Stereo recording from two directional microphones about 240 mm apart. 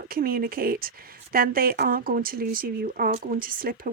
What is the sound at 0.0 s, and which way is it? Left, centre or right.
Speech, right.